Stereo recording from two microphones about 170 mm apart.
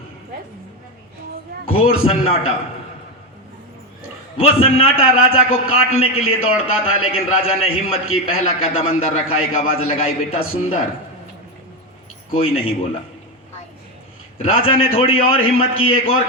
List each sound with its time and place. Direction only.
1.6 s a man's voice: 35° left (ahead or behind)
4.4 s a man's voice: 35° left (ahead or behind)
12.3 s a man's voice: 35° left (ahead or behind)
14.3 s a man's voice: 35° left (ahead or behind)